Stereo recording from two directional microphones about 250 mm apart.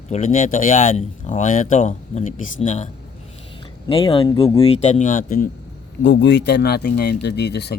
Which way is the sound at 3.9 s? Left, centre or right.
Left.